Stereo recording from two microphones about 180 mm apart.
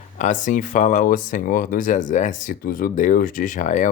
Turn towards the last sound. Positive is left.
turn(degrees=45)  # may be behind; listen again after turning